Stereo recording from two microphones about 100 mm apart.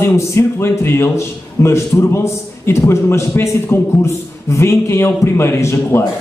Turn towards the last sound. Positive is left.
turn(degrees=25)  # may be behind; listen again after turning